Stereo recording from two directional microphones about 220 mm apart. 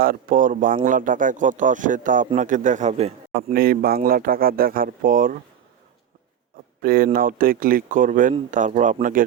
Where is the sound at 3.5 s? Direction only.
40° right (ahead or behind).